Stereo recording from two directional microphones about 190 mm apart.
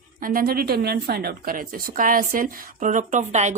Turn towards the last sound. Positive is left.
turn(degrees=-40)  # may be behind; listen again after turning